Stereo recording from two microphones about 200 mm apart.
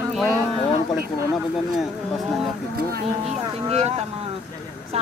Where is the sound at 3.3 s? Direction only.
30° right (ahead or behind).